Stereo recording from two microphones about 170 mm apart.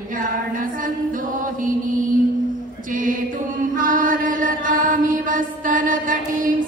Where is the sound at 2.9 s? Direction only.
50° right (ahead or behind).